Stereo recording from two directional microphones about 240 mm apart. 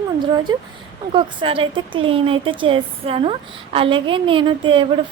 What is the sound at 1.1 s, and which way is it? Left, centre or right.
Speech, right.